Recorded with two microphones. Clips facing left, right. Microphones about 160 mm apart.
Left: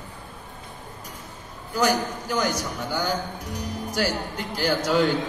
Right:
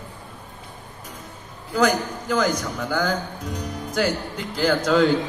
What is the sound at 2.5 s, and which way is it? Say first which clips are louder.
A man's voice: right 3 dB; 55° right (ahead or behind).